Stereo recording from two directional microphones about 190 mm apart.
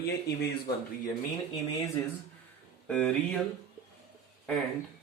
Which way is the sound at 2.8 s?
5° left (ahead or behind).